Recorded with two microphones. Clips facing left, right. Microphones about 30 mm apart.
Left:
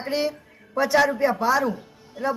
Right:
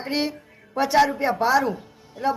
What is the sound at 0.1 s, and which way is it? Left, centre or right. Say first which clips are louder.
Speech: left 1 dB; right.